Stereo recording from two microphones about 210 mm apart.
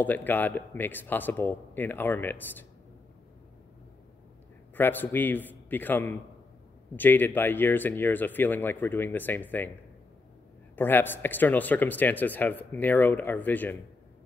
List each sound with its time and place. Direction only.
0.0 s speech: 10° left (ahead or behind)
4.7 s speech: 10° left (ahead or behind)
10.8 s speech: 10° left (ahead or behind)